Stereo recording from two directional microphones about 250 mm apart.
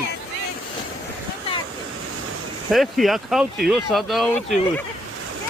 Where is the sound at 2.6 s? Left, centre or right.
Centre.